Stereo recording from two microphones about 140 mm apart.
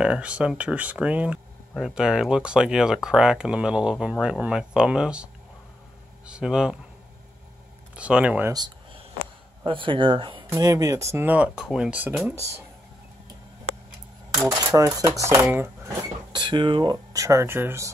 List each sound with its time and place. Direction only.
0.0 s speech: 10° right (ahead or behind)
7.9 s speech: 10° right (ahead or behind)
8.5 s a sound: 30° right (ahead or behind)
9.7 s speech: 35° right (ahead or behind)
10.5 s speech: 25° right (ahead or behind); by 12.1 s 10° right (ahead or behind)
14.4 s speech: 25° right (ahead or behind)
16.3 s speech: 35° right (ahead or behind); by 17.9 s 20° right (ahead or behind)